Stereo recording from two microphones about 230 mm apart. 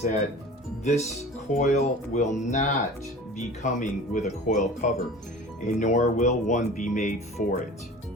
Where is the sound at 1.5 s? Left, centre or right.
Left.